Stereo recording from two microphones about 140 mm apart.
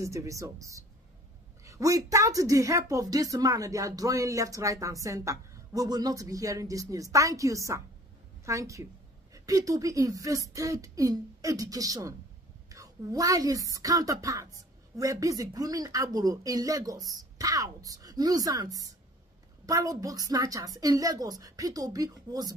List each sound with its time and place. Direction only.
0.0 s a woman's voice: 20° right (ahead or behind)